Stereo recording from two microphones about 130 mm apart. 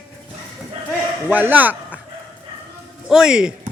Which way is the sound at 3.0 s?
5° right (ahead or behind).